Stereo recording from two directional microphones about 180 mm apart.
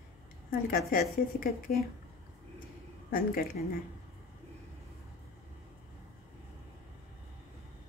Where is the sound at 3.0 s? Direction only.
55° left (ahead or behind).